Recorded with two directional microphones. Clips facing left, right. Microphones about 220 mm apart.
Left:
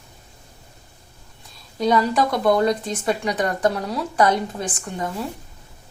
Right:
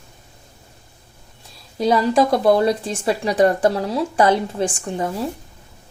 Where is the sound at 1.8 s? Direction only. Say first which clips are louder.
Right 3 dB; 30° right (ahead or behind).